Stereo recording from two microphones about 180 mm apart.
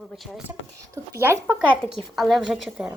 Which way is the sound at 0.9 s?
15° right (ahead or behind).